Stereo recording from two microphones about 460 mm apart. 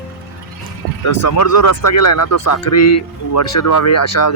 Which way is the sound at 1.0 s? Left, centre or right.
Left.